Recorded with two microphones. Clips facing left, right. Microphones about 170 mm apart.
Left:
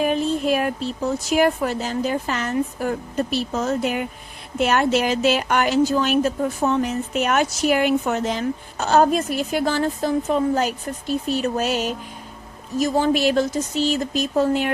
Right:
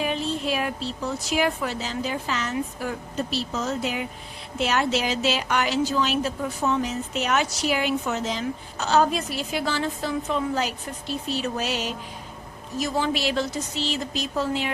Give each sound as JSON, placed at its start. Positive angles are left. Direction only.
{"t": 0.0, "sound": "a woman's voice", "side_deg": 50}